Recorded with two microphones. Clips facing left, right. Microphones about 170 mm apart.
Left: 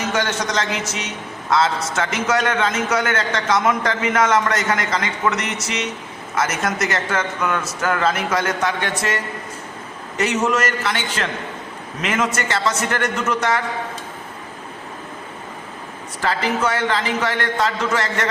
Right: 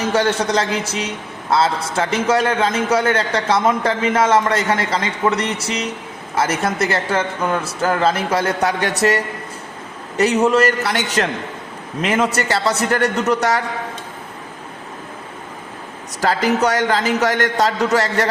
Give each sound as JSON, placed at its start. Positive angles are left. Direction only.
{"t": 0.1, "sound": "a man's voice", "side_deg": -30}
{"t": 16.2, "sound": "a man's voice", "side_deg": -40}